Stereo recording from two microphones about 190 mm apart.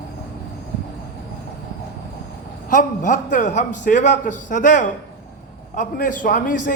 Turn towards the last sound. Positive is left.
turn(degrees=45)  # may be behind; listen again after turning